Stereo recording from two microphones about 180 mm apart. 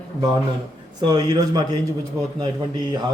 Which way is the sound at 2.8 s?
25° right (ahead or behind).